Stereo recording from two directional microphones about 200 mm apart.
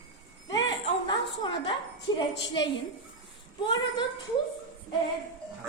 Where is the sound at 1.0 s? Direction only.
25° left (ahead or behind).